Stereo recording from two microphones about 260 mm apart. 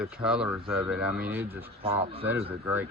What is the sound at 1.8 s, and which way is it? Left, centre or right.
Speech, right.